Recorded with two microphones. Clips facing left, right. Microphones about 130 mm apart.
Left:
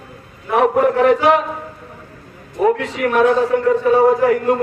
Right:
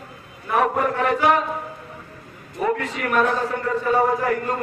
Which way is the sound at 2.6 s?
75° left (ahead or behind).